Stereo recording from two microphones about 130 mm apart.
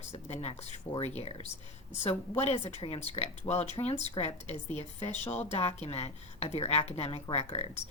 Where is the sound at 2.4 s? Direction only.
55° left (ahead or behind).